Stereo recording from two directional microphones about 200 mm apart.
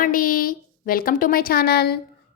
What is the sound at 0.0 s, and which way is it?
A woman's voice, 45° left (ahead or behind).